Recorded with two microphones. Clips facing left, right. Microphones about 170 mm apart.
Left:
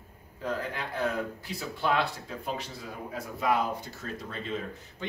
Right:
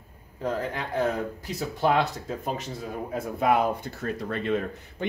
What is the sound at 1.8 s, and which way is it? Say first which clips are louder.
Speech: right 5 dB; 45° right (ahead or behind).